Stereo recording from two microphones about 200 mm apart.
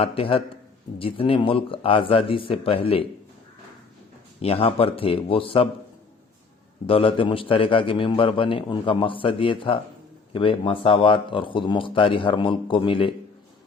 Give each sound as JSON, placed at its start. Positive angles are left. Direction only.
{"t": 0.0, "sound": "a man's voice", "side_deg": 30}
{"t": 4.4, "sound": "a man's voice", "side_deg": 30}
{"t": 6.8, "sound": "a man's voice", "side_deg": 25}